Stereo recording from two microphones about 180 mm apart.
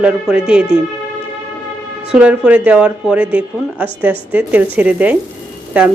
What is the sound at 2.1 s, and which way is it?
Speech, 5° right (ahead or behind).